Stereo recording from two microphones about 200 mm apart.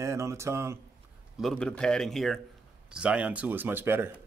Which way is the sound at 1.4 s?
Centre (ahead or behind).